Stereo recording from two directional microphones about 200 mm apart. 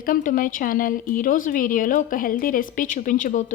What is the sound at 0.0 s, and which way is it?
A woman's voice, 45° left (ahead or behind).